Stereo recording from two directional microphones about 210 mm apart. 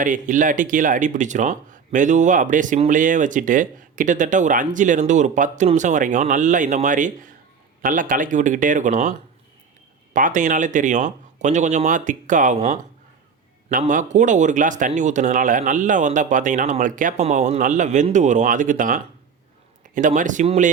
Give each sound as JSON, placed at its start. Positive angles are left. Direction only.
{"t": 0.0, "sound": "speech", "side_deg": -40}